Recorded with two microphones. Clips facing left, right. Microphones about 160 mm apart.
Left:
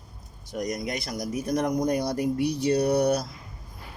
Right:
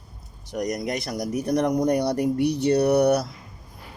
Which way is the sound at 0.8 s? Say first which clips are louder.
Right 3 dB; 65° right (ahead or behind).